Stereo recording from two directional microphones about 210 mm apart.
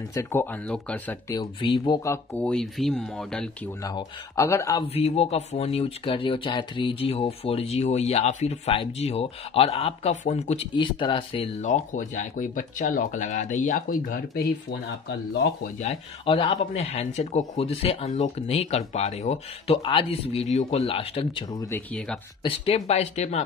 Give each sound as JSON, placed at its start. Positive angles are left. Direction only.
{"t": 0.1, "sound": "speech", "side_deg": 10}
{"t": 1.4, "sound": "speech", "side_deg": 20}
{"t": 2.3, "sound": "speech", "side_deg": 5}
{"t": 3.8, "sound": "speech", "side_deg": 15}
{"t": 4.8, "sound": "speech", "side_deg": 30}
{"t": 11.6, "sound": "speech", "side_deg": 35}
{"t": 14.7, "sound": "speech", "side_deg": 55}
{"t": 15.8, "sound": "speech", "side_deg": 30}
{"t": 21.6, "sound": "speech", "side_deg": 5}
{"t": 22.4, "sound": "speech", "side_deg": 30}